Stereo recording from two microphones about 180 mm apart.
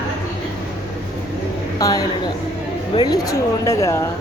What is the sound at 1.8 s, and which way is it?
A woman's voice, 20° left (ahead or behind).